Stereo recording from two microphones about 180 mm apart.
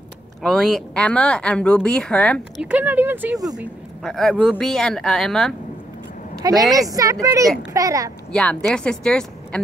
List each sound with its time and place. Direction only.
0.4 s speech: centre (ahead or behind)
2.6 s speech: 10° right (ahead or behind)
4.0 s speech: centre (ahead or behind)
6.4 s speech: 20° right (ahead or behind)
8.3 s speech: 5° left (ahead or behind)